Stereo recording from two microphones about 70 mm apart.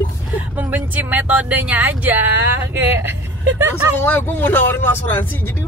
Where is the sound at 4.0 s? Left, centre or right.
Left.